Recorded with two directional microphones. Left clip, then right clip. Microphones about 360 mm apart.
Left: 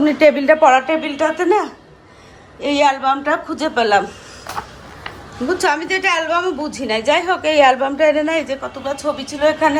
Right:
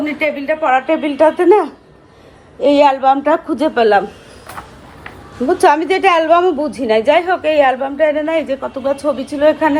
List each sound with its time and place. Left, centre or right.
0.0 s a woman's voice: centre
0.6 s a woman's voice: centre
1.0 s a woman's voice: centre
5.5 s a woman's voice: centre